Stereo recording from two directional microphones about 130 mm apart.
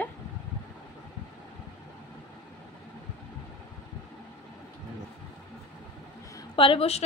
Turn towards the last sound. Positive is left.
turn(degrees=50)  # may be behind; listen again after turning